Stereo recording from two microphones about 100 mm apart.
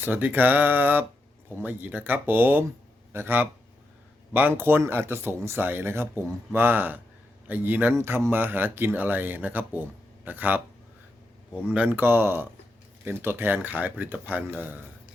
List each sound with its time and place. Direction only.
0.0 s speech: 20° right (ahead or behind)
11.6 s speech: 15° right (ahead or behind)